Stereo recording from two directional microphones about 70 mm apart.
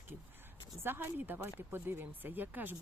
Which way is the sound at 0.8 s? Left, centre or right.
Right.